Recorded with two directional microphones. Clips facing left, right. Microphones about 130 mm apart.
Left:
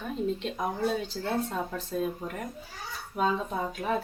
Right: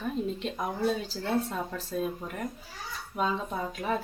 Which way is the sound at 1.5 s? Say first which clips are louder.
Left 1 dB; centre (ahead or behind).